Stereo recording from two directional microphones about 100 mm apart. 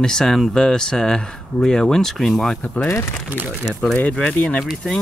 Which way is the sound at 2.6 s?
15° left (ahead or behind).